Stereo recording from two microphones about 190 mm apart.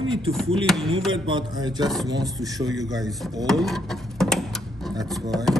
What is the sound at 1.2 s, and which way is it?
A man's voice, 25° right (ahead or behind).